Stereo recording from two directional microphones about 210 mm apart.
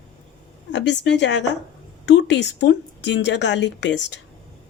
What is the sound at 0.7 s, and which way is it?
A woman's voice, 55° left (ahead or behind).